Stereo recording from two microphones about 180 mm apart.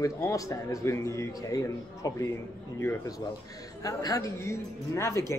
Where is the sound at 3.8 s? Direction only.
20° left (ahead or behind).